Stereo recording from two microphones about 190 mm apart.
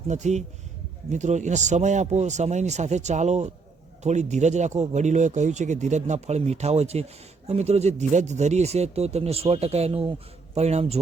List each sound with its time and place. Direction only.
0.1 s speech: 40° right (ahead or behind)